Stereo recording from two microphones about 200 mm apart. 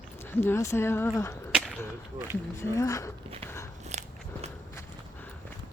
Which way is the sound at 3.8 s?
35° right (ahead or behind).